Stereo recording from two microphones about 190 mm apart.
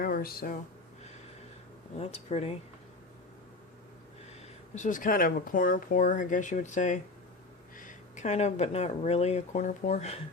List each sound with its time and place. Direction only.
0.0 s speech: 50° left (ahead or behind)
2.0 s speech: 35° left (ahead or behind)
4.7 s speech: 40° left (ahead or behind)